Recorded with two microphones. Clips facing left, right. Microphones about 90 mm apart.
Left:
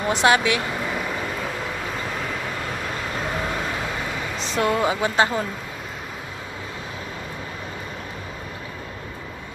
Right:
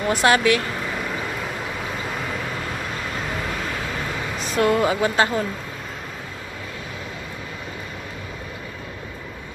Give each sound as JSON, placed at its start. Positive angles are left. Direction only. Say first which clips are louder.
{"t": 0.1, "sound": "speech", "louder": "right 1 dB", "side_deg": 20}
{"t": 4.6, "sound": "speech", "louder": "right 2 dB", "side_deg": 20}